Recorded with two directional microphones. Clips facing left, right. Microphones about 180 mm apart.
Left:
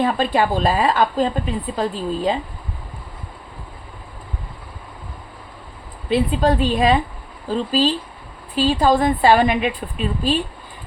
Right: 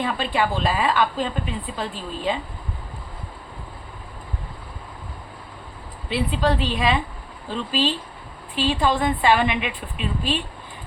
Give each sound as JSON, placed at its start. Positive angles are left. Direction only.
{"t": 0.0, "sound": "speech", "side_deg": 40}
{"t": 6.1, "sound": "a woman's voice", "side_deg": 45}